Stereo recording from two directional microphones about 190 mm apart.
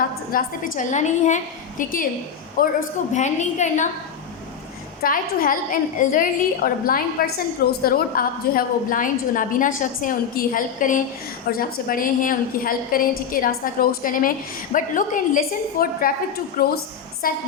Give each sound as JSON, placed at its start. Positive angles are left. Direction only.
{"t": 0.3, "sound": "a woman's voice", "side_deg": 45}
{"t": 5.0, "sound": "a woman's voice", "side_deg": 50}